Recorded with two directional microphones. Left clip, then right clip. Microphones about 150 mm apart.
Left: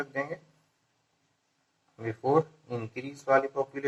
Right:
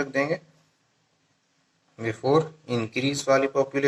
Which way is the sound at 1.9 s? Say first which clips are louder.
Right 4 dB; 35° right (ahead or behind).